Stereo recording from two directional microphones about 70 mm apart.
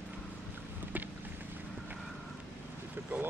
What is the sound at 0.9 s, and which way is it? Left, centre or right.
Boat, right.